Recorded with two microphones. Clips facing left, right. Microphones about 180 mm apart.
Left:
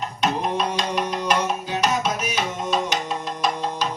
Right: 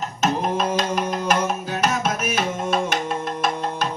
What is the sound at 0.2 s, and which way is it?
Music, 45° right (ahead or behind).